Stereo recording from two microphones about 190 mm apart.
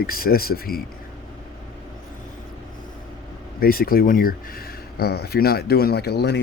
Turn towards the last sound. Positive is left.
turn(degrees=60)  # may be behind; listen again after turning